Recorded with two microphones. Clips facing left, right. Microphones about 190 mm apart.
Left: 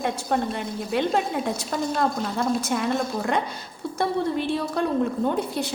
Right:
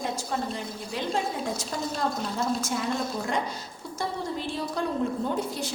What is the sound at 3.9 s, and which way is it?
Speech, 60° left (ahead or behind).